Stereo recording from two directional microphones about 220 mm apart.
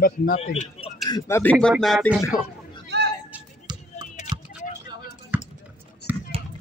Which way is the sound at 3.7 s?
20° right (ahead or behind).